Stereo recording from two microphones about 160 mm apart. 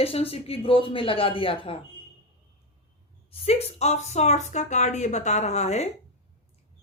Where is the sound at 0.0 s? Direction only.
35° left (ahead or behind).